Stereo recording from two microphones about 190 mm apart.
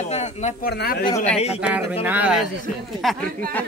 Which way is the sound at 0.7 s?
55° left (ahead or behind).